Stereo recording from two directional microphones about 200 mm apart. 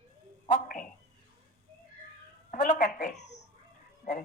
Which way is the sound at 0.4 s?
45° left (ahead or behind).